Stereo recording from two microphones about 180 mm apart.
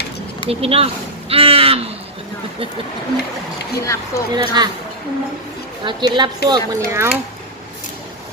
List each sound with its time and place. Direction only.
0.4 s speech: 35° right (ahead or behind)
1.3 s a sound: 30° right (ahead or behind)
3.8 s speech: 15° left (ahead or behind)
4.3 s speech: 25° right (ahead or behind)
5.8 s speech: 25° right (ahead or behind)